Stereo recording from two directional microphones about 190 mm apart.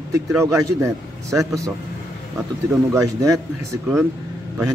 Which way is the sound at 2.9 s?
15° right (ahead or behind).